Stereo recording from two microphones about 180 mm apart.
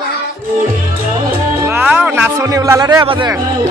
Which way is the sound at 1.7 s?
10° right (ahead or behind).